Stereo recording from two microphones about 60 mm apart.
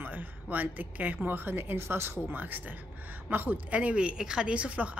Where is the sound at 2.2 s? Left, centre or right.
Right.